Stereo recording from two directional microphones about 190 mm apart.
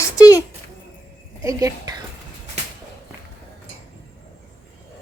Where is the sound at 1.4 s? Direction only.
15° right (ahead or behind).